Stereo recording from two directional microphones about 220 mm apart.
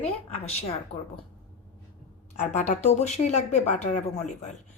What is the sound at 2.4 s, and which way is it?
Speech, 30° left (ahead or behind).